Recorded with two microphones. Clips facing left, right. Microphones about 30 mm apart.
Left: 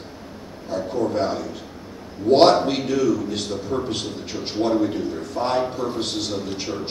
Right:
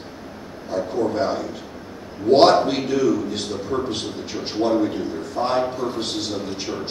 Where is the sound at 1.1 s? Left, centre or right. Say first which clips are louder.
Right 1 dB; centre.